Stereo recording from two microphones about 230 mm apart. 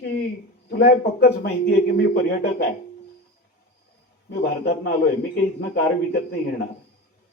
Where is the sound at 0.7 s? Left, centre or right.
Left.